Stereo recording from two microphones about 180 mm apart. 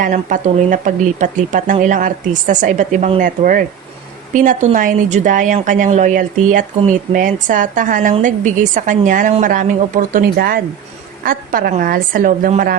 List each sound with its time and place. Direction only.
0.0 s speech: 45° right (ahead or behind)